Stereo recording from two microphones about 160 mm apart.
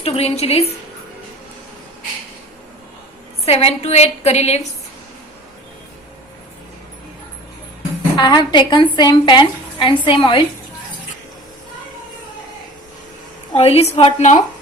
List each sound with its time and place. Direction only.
0.0 s a woman's voice: 40° left (ahead or behind)
3.4 s a woman's voice: 40° left (ahead or behind)
8.1 s a woman's voice: 25° left (ahead or behind)
13.6 s a woman's voice: 40° left (ahead or behind)